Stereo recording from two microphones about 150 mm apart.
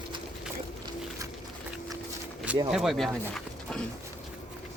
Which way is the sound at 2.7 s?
Centre (ahead or behind).